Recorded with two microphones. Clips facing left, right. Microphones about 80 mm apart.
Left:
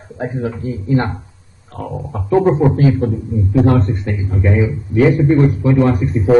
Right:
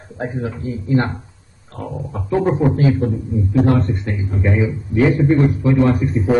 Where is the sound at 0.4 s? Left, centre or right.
Left.